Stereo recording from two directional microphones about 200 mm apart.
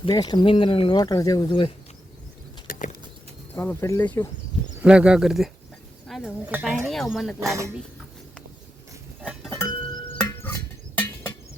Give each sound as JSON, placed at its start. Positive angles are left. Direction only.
{"t": 0.0, "sound": "speech", "side_deg": 20}
{"t": 2.6, "sound": "a sound", "side_deg": 40}
{"t": 3.5, "sound": "speech", "side_deg": 10}
{"t": 4.8, "sound": "speech", "side_deg": -5}
{"t": 7.3, "sound": "speech", "side_deg": -15}
{"t": 9.2, "sound": "music", "side_deg": 0}
{"t": 9.9, "sound": "music", "side_deg": 20}
{"t": 10.4, "sound": "music", "side_deg": 10}